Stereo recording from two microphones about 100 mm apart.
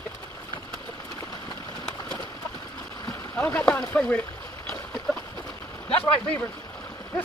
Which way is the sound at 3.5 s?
10° left (ahead or behind).